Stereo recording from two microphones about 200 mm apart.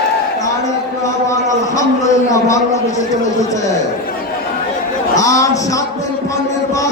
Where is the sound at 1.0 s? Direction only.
15° left (ahead or behind).